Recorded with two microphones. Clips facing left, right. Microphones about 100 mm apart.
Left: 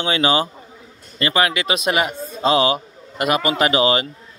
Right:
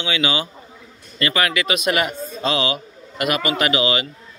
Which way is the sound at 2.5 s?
35° left (ahead or behind).